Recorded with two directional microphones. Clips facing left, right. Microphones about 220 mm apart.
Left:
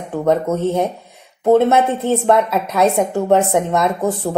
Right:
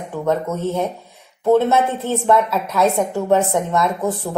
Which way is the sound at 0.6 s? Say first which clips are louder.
Left 3 dB; 20° left (ahead or behind).